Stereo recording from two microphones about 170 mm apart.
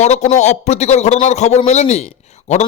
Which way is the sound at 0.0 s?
40° left (ahead or behind).